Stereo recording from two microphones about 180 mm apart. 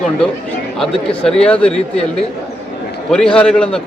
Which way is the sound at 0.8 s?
5° left (ahead or behind).